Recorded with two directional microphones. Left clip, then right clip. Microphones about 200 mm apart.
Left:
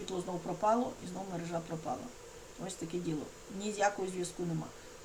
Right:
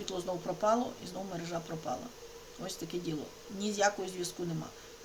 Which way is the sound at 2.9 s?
10° right (ahead or behind).